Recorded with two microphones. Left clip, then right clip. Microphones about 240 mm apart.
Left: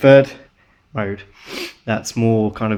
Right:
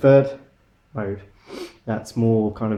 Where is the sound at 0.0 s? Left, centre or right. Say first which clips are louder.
Left 5 dB; left.